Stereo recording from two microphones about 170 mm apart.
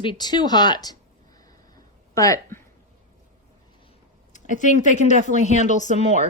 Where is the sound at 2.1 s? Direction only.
20° left (ahead or behind).